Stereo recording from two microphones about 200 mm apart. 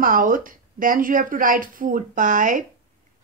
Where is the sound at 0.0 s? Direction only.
45° right (ahead or behind).